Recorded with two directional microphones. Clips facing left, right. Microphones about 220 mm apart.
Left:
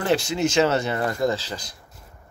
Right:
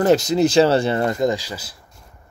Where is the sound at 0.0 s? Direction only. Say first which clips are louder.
Right 6 dB; 40° right (ahead or behind).